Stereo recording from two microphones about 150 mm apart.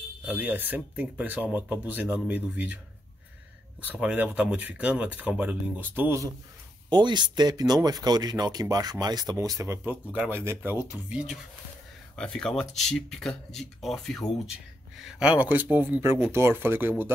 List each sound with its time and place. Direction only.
0.2 s speech: 10° right (ahead or behind)
3.8 s speech: 10° right (ahead or behind)
6.9 s speech: 30° right (ahead or behind); by 11.3 s 5° right (ahead or behind)
12.2 s speech: 5° left (ahead or behind); by 16.9 s 15° right (ahead or behind)